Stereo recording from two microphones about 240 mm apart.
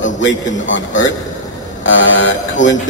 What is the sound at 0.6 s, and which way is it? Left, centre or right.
A man's voice, left.